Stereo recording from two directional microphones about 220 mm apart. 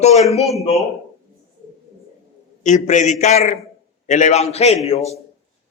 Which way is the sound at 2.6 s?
35° left (ahead or behind).